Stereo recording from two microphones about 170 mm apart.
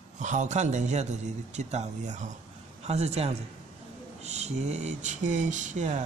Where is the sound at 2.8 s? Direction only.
40° right (ahead or behind).